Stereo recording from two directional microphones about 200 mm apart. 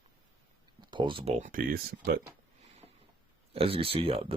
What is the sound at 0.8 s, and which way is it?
Speech, 25° right (ahead or behind).